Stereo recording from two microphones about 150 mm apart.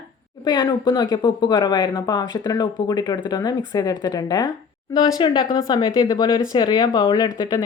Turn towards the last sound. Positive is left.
turn(degrees=25)  # may be behind; listen again after turning